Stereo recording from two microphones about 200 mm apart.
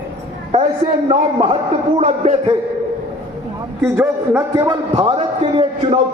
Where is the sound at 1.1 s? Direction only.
30° right (ahead or behind).